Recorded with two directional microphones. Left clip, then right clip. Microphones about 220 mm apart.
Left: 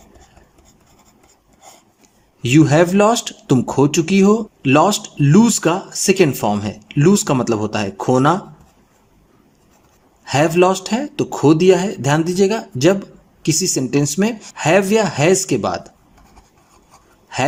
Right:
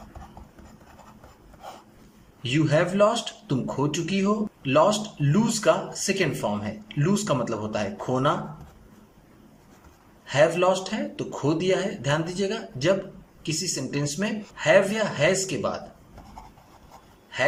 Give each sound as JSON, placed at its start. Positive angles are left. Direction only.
{"t": 2.4, "sound": "speech", "side_deg": 50}
{"t": 10.2, "sound": "speech", "side_deg": 50}